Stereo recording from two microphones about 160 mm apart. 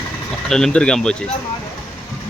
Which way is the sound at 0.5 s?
5° left (ahead or behind).